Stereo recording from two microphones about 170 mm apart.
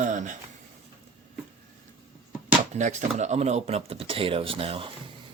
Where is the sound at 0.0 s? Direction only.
45° right (ahead or behind).